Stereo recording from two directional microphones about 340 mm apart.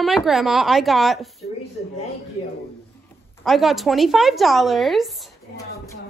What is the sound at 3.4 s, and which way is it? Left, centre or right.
A woman's voice, centre.